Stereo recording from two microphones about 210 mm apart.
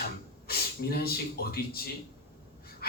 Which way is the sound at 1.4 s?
45° left (ahead or behind).